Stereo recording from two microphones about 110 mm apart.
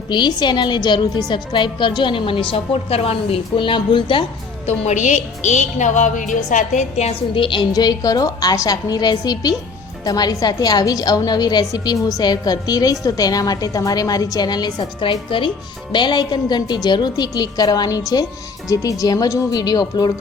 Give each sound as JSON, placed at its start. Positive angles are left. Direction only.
{"t": 0.1, "sound": "a woman's voice", "side_deg": 40}
{"t": 4.6, "sound": "a woman's voice", "side_deg": 85}
{"t": 7.3, "sound": "a woman's voice", "side_deg": 50}